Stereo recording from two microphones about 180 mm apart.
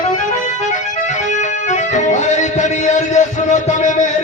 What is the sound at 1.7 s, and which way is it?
Music, 45° left (ahead or behind).